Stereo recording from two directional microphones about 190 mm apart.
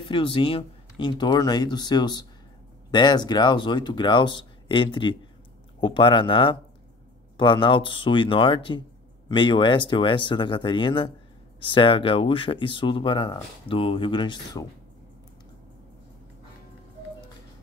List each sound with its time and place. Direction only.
0.0 s speech: 25° left (ahead or behind)